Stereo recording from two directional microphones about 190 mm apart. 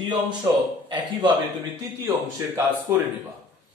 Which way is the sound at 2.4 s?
15° right (ahead or behind).